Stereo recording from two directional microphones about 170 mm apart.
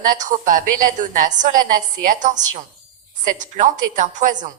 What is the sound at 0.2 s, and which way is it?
A woman's voice, 50° right (ahead or behind).